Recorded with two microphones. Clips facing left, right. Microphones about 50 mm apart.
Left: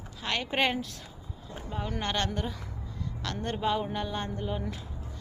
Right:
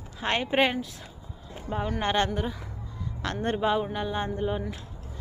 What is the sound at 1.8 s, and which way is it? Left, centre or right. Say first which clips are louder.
Speech: right 5 dB; centre.